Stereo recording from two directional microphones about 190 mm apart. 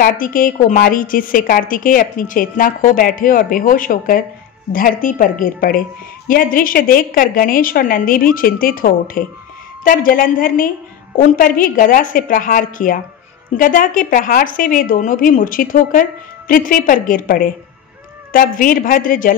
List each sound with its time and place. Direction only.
0.0 s a woman's voice: 45° left (ahead or behind)